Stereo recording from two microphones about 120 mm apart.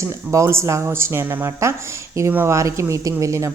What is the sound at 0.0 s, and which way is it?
A woman's voice, 25° right (ahead or behind).